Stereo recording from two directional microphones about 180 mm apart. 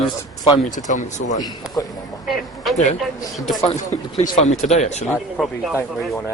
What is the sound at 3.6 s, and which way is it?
Speech, 40° left (ahead or behind).